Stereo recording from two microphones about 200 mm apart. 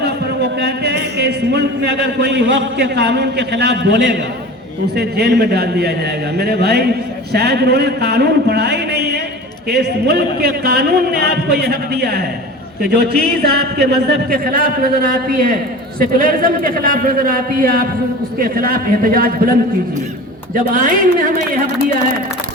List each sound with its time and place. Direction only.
0.0 s a man's voice: 55° right (ahead or behind)
20.7 s speech: 40° right (ahead or behind)